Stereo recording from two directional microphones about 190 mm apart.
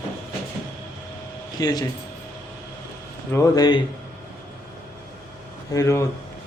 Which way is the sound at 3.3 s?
20° left (ahead or behind).